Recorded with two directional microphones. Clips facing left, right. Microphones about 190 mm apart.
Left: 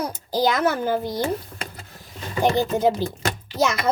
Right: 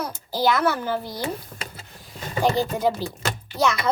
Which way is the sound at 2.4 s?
20° left (ahead or behind).